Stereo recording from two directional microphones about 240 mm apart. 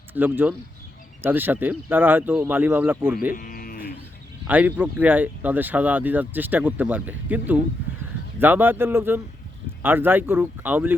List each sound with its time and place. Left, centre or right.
0.1 s speech: centre
3.3 s sheep: left
4.4 s speech: centre